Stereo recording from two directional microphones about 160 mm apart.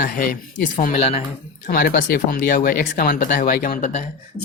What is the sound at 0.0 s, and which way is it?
Speech, 60° left (ahead or behind).